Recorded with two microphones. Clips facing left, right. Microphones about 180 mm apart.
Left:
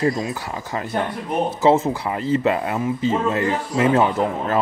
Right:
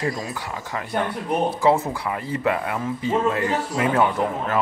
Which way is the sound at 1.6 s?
25° left (ahead or behind).